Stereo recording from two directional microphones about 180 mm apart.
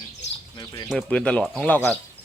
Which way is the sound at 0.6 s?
20° left (ahead or behind).